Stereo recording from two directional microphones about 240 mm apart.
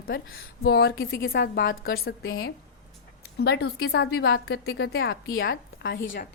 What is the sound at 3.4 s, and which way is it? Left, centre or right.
A woman's voice, left.